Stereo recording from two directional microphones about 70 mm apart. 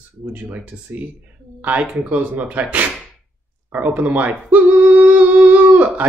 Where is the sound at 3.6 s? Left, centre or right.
Right.